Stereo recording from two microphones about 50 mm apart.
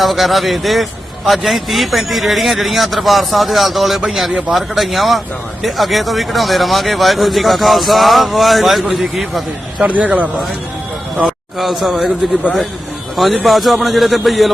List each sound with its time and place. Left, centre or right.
0.0 s speech: centre
4.3 s a man's voice: centre
4.5 s speech: centre
9.8 s a man's voice: right
11.3 s a man's voice: centre
13.1 s speech: centre